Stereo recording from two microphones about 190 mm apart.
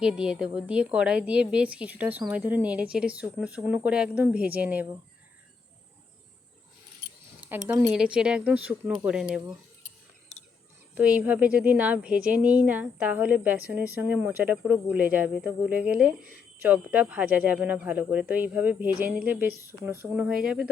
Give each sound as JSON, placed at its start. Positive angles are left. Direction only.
{"t": 0.0, "sound": "a woman's voice", "side_deg": -5}
{"t": 7.8, "sound": "a woman's voice", "side_deg": -5}
{"t": 10.9, "sound": "a woman's voice", "side_deg": -5}